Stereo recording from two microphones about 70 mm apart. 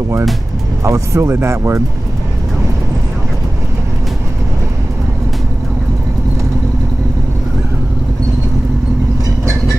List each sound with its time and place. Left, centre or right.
0.8 s speech: right